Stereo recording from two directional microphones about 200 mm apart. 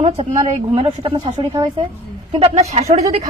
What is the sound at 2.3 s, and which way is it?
Speech, 30° right (ahead or behind).